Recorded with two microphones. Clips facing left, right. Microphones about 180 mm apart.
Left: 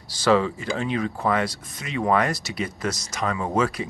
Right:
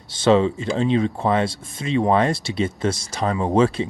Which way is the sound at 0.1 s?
25° right (ahead or behind).